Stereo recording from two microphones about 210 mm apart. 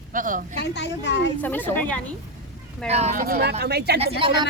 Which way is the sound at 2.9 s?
30° right (ahead or behind).